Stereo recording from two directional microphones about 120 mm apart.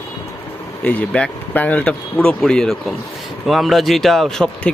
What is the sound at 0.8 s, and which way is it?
Speech, 10° left (ahead or behind).